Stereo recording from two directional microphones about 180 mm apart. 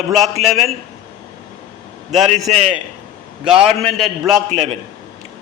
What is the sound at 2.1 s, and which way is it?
Speech, centre (ahead or behind).